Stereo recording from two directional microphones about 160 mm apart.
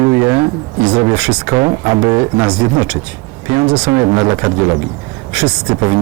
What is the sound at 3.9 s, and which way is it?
Speech, 20° right (ahead or behind).